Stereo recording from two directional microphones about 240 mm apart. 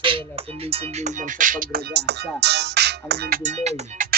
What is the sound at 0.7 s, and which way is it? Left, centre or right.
Speech, right.